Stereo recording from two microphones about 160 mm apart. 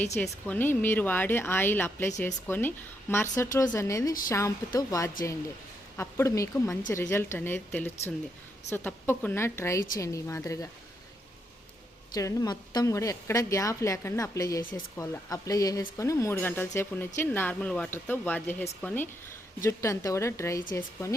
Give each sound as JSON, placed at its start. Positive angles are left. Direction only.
{"t": 0.2, "sound": "a woman's voice", "side_deg": 10}
{"t": 12.1, "sound": "a woman's voice", "side_deg": 25}